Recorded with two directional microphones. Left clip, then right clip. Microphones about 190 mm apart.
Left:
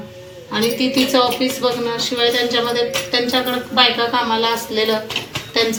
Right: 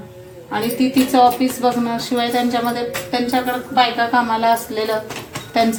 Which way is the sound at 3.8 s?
35° right (ahead or behind).